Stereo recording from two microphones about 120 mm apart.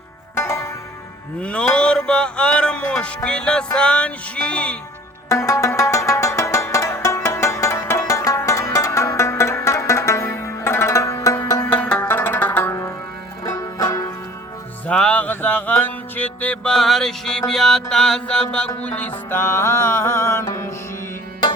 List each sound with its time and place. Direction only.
0.3 s zither: 25° left (ahead or behind)
1.4 s music: 10° left (ahead or behind)
5.3 s music: 25° left (ahead or behind)
11.6 s music: 15° left (ahead or behind)
13.4 s banjo: 30° left (ahead or behind)
14.8 s music: 10° left (ahead or behind)